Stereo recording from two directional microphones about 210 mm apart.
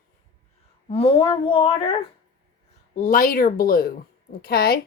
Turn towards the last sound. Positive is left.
turn(degrees=45)  # may be behind; listen again after turning